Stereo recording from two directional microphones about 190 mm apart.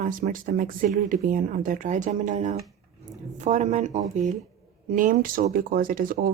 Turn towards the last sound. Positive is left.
turn(degrees=-50)  # may be behind; listen again after turning